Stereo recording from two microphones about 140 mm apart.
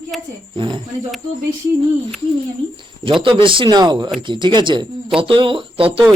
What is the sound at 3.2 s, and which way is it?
Speech, 40° right (ahead or behind).